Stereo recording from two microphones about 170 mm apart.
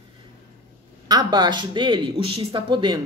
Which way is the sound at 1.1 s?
25° right (ahead or behind).